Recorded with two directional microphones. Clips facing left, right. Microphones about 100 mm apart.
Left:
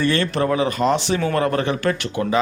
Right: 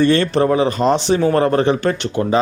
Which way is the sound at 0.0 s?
30° right (ahead or behind).